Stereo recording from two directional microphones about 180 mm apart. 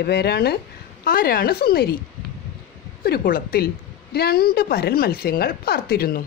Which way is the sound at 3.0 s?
55° left (ahead or behind).